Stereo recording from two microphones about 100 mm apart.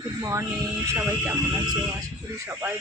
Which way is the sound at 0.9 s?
20° right (ahead or behind).